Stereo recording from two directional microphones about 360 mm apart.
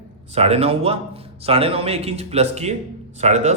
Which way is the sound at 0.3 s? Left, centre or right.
Centre.